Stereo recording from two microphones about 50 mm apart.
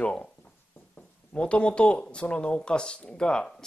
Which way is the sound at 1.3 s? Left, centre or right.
Left.